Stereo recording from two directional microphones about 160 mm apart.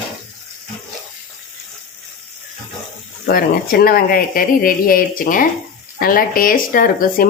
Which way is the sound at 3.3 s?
70° left (ahead or behind).